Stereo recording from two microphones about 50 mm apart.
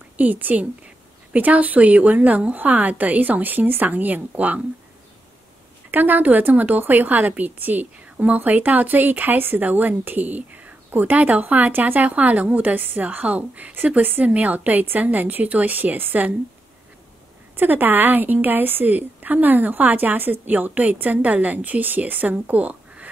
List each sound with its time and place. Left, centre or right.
0.2 s a woman's voice: right
5.9 s a woman's voice: right
17.6 s a woman's voice: right